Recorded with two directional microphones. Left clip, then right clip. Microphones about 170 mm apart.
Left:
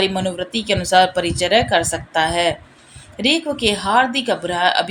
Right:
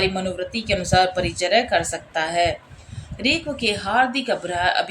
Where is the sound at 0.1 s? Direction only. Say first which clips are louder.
Left 4 dB; 25° left (ahead or behind).